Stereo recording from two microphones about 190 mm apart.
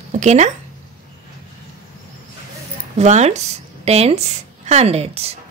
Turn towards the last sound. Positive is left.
turn(degrees=-30)  # may be behind; listen again after turning